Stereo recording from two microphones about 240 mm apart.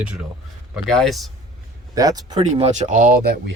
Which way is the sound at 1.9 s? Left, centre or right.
Centre.